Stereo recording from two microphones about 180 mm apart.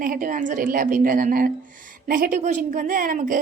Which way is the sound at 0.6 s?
50° right (ahead or behind).